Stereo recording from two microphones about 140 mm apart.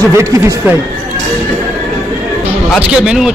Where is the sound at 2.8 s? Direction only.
5° right (ahead or behind).